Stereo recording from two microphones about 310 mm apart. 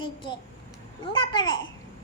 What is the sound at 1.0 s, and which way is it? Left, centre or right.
Babbling, centre.